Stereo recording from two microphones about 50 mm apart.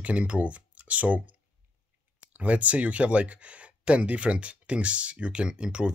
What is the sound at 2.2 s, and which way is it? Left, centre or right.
Speech, right.